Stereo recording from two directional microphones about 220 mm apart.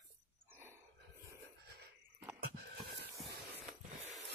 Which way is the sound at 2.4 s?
50° right (ahead or behind).